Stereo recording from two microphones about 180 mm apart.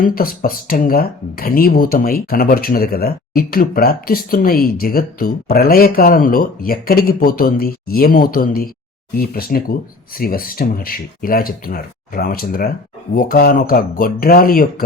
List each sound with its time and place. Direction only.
0.0 s speech: 55° left (ahead or behind)